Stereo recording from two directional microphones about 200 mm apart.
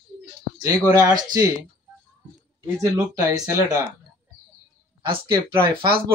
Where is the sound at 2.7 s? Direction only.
15° right (ahead or behind).